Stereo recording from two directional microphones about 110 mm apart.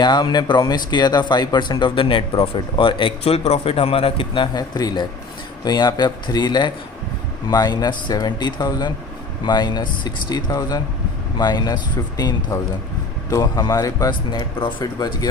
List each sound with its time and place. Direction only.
0.0 s speech: 40° left (ahead or behind); by 4.4 s 55° left (ahead or behind)
4.5 s speech: 40° left (ahead or behind)
14.1 s speech: 45° left (ahead or behind)